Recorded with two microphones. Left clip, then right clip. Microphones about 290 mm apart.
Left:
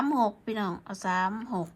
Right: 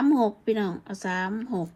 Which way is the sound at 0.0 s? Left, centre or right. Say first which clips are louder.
Right 4 dB; centre.